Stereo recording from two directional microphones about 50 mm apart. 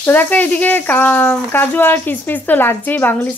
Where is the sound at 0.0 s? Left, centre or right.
Left.